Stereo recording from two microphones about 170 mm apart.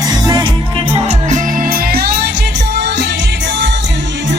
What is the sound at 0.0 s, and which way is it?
Music, 25° right (ahead or behind).